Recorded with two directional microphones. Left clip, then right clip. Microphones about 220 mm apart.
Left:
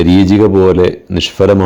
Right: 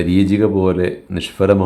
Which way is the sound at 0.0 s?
30° left (ahead or behind).